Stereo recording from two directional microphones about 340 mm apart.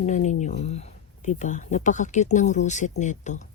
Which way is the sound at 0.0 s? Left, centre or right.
Left.